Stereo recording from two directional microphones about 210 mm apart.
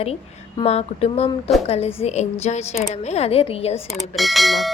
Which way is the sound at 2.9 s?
30° left (ahead or behind).